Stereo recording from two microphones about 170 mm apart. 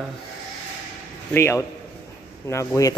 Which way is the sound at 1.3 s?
15° left (ahead or behind).